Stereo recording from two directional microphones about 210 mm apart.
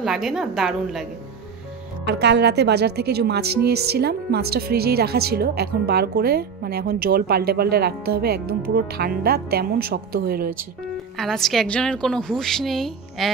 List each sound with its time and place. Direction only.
0.0 s a woman's voice: centre (ahead or behind)
2.0 s a woman's voice: 55° right (ahead or behind)
11.1 s a woman's voice: centre (ahead or behind)